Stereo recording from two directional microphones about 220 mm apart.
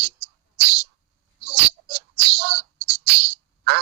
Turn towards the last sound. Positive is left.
turn(degrees=-50)  # may be behind; listen again after turning